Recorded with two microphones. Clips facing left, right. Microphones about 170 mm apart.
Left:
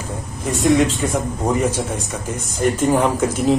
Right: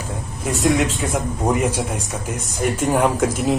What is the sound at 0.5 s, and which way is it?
A man's voice, 10° right (ahead or behind).